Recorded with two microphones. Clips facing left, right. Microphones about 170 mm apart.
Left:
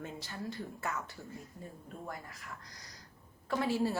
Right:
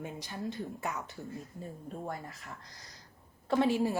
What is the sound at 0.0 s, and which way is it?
Speech, 15° right (ahead or behind).